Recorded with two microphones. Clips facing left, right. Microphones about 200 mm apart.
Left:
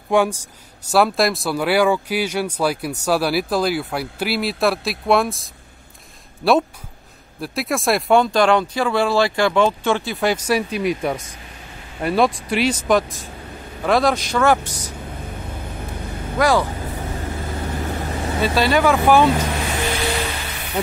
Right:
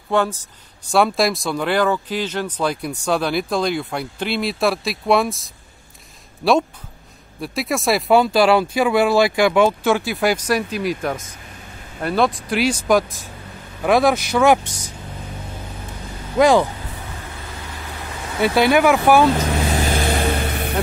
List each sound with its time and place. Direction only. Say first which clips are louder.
0.1 s speech: left 2 dB; 10° left (ahead or behind)
0.9 s speech: even; centre (ahead or behind)
10.4 s speech: left 1 dB; 5° left (ahead or behind); by 14.6 s 10° right (ahead or behind)
16.3 s speech: right 4 dB; 20° right (ahead or behind)
17.6 s vehicle: left 9 dB; 45° left (ahead or behind)
18.5 s speech: right 3 dB; 15° right (ahead or behind)
19.9 s vehicle: right 3 dB; 50° right (ahead or behind)